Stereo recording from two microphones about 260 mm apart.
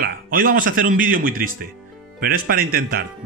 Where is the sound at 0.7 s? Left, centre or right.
Right.